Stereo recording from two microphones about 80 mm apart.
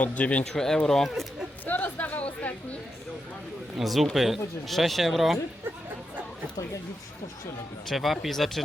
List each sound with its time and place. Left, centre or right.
0.0 s speech: centre
0.6 s speech: centre
1.6 s a sound: left
3.8 s speech: centre
7.9 s speech: centre